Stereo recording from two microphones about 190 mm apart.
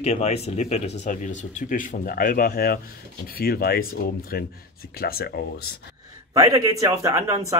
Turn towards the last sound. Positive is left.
turn(degrees=-15)  # may be behind; listen again after turning